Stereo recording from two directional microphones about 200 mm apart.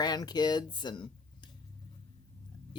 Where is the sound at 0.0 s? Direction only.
20° left (ahead or behind).